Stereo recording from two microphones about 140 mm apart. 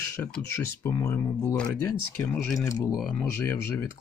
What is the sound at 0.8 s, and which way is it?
Speech, 20° left (ahead or behind).